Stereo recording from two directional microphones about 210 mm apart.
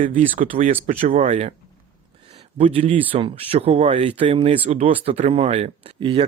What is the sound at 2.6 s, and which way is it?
Speech, 25° right (ahead or behind).